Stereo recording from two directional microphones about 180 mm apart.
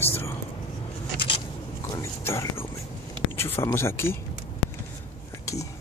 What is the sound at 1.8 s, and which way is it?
Speech, 15° left (ahead or behind).